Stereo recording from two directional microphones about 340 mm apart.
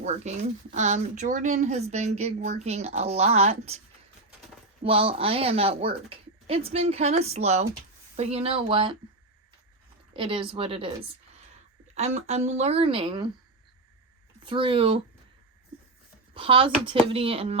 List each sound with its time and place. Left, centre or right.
0.0 s speech: centre
4.8 s speech: centre
10.2 s speech: centre
11.9 s speech: centre
14.4 s speech: centre
16.3 s speech: centre